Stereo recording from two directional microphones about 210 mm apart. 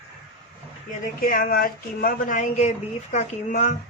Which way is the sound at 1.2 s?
45° left (ahead or behind).